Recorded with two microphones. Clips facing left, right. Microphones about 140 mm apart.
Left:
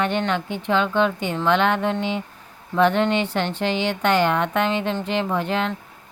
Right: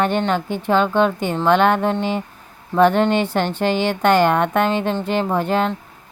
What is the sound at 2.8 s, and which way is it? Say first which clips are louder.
A woman's voice: right 4 dB; 45° right (ahead or behind).